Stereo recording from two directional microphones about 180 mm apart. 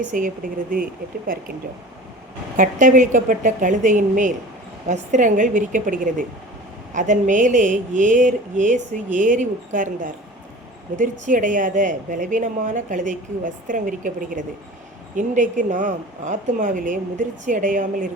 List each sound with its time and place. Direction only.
0.1 s a woman's voice: 50° right (ahead or behind)
2.6 s a woman's voice: 45° right (ahead or behind)